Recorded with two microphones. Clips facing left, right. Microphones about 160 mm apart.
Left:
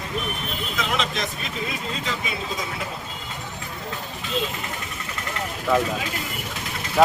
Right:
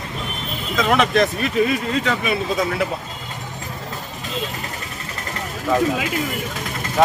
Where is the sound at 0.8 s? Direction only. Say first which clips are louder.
Right 10 dB; 60° right (ahead or behind).